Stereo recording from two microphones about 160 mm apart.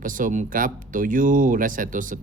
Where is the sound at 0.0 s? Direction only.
55° right (ahead or behind).